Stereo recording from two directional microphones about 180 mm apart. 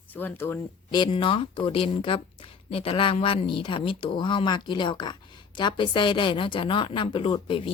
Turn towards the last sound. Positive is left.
turn(degrees=30)  # may be behind; listen again after turning